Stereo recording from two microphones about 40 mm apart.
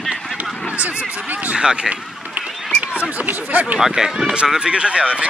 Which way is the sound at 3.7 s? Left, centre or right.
Centre.